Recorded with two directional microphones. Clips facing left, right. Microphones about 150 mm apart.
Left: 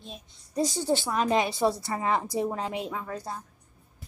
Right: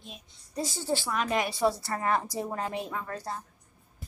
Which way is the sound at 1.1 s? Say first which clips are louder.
Left 4 dB; 30° left (ahead or behind).